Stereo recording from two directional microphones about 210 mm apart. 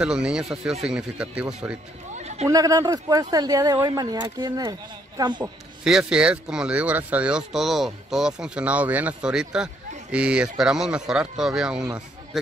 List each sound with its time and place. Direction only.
0.0 s speech: 5° right (ahead or behind)
2.1 s a sound: 30° right (ahead or behind)
2.4 s speech: 15° right (ahead or behind)
5.9 s speech: 5° right (ahead or behind)